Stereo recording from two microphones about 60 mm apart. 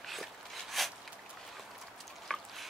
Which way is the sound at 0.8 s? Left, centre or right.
Centre.